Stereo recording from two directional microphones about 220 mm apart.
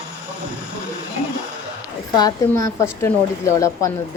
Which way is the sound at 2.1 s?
15° left (ahead or behind).